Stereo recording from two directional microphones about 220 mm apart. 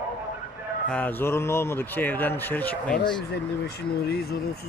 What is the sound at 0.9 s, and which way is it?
Speech, 10° left (ahead or behind).